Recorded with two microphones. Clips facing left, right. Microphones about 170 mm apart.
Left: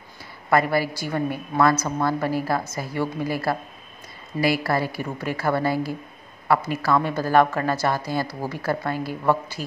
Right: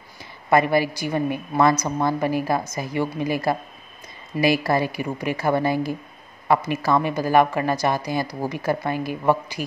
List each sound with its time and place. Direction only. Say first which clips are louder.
0.5 s speech: right 2 dB; 20° right (ahead or behind)